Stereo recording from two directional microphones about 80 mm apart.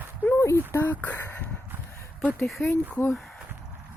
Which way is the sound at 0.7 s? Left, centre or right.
Left.